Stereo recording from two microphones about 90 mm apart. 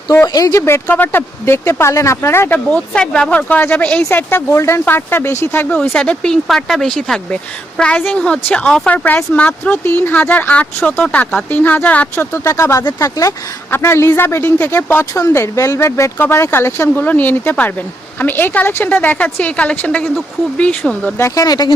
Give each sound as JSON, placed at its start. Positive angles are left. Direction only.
{"t": 0.3, "sound": "speech", "side_deg": 40}
{"t": 0.6, "sound": "speech", "side_deg": 25}
{"t": 2.6, "sound": "speech", "side_deg": 10}
{"t": 5.9, "sound": "speech", "side_deg": 10}
{"t": 10.8, "sound": "speech", "side_deg": 5}
{"t": 21.2, "sound": "speech", "side_deg": 35}